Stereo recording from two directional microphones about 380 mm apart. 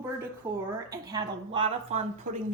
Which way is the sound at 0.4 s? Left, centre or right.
Centre.